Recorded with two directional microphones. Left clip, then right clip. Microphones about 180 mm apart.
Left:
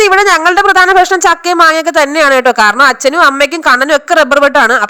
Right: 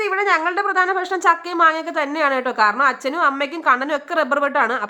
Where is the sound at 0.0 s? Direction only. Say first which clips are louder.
Left 12 dB; 40° left (ahead or behind).